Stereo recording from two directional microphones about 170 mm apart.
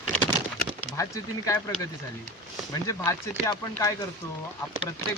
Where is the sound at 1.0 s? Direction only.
20° left (ahead or behind).